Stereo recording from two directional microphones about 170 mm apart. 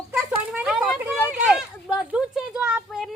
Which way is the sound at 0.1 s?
5° right (ahead or behind).